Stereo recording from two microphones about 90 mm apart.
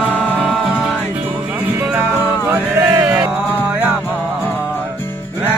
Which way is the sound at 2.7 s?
35° right (ahead or behind).